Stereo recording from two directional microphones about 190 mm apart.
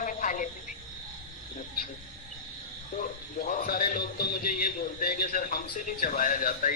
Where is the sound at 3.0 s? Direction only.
45° left (ahead or behind).